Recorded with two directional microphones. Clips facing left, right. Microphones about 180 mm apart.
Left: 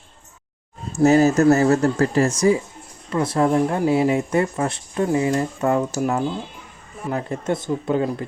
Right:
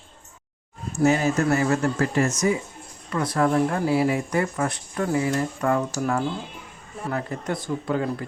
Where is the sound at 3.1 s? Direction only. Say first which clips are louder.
Left 3 dB; 25° left (ahead or behind).